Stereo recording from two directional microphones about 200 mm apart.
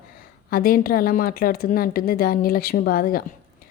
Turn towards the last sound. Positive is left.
turn(degrees=45)  # may be behind; listen again after turning